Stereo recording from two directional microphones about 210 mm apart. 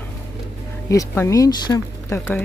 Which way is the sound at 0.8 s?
15° left (ahead or behind).